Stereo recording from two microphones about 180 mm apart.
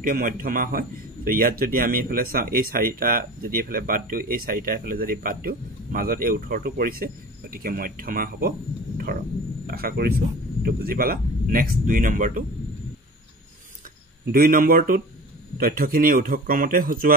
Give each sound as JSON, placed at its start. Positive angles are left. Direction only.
{"t": 0.0, "sound": "a man's voice", "side_deg": -50}
{"t": 14.3, "sound": "a man's voice", "side_deg": -50}